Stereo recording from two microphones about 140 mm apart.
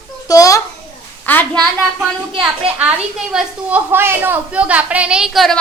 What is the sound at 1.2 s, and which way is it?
Speech, 10° left (ahead or behind).